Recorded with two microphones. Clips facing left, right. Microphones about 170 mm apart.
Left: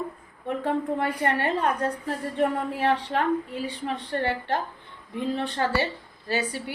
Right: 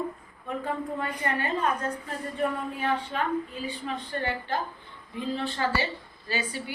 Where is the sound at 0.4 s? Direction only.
70° left (ahead or behind).